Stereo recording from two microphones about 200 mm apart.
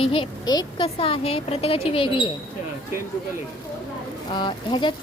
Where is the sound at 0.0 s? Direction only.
25° left (ahead or behind).